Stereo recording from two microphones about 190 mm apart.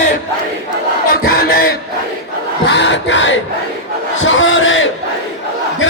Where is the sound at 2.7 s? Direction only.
70° left (ahead or behind).